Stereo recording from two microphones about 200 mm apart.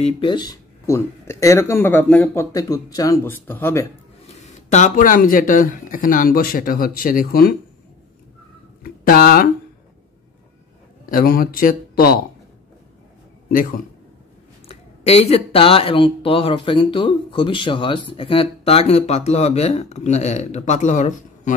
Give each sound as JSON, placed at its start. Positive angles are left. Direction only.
{"t": 0.0, "sound": "speech", "side_deg": 25}
{"t": 4.4, "sound": "speech", "side_deg": 35}
{"t": 9.0, "sound": "speech", "side_deg": 50}
{"t": 11.1, "sound": "speech", "side_deg": 45}
{"t": 13.5, "sound": "a man's voice", "side_deg": 45}
{"t": 14.7, "sound": "speech", "side_deg": 30}